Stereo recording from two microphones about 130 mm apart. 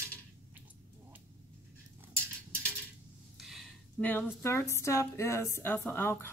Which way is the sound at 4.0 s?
15° left (ahead or behind).